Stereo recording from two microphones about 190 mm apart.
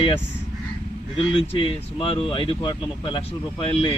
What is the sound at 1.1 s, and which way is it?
Speech, 30° left (ahead or behind).